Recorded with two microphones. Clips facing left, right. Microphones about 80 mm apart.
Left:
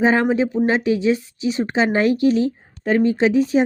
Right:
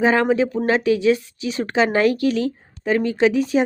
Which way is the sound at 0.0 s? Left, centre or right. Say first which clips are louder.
Even; left.